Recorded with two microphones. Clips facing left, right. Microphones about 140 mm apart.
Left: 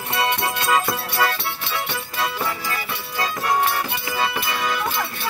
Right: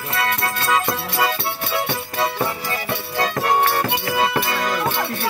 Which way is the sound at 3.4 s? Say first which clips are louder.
Right 2 dB; 30° right (ahead or behind).